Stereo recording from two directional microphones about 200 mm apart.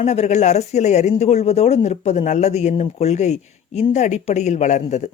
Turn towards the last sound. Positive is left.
turn(degrees=35)  # may be behind; listen again after turning